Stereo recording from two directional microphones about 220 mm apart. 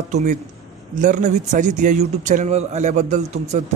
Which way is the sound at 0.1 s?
35° right (ahead or behind).